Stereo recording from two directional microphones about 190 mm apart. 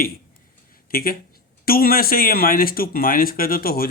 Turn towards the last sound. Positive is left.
turn(degrees=50)  # may be behind; listen again after turning